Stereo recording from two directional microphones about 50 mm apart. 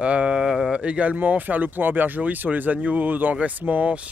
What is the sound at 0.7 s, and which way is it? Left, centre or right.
Speech, right.